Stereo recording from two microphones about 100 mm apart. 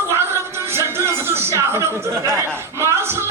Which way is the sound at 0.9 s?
25° right (ahead or behind).